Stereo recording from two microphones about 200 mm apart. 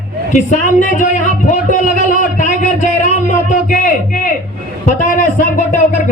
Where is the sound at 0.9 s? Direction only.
40° left (ahead or behind).